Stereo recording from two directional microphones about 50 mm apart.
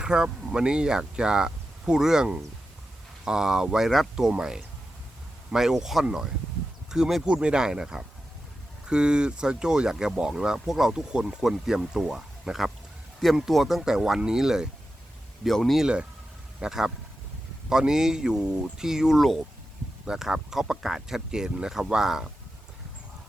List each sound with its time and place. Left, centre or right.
0.0 s speech: centre
4.1 s speech: centre
11.1 s speech: centre
15.4 s speech: centre
16.6 s speech: centre